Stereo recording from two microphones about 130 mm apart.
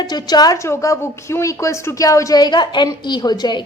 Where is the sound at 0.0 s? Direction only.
35° left (ahead or behind).